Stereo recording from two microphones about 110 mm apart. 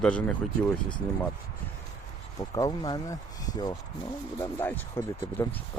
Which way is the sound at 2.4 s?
35° left (ahead or behind).